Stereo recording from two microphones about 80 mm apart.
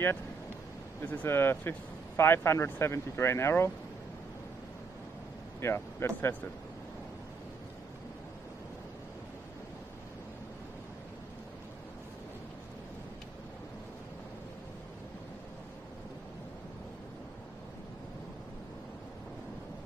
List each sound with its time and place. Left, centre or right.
1.0 s speech: left
5.6 s speech: left